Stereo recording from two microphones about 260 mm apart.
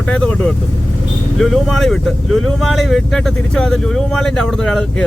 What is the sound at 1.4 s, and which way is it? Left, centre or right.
Speech, centre.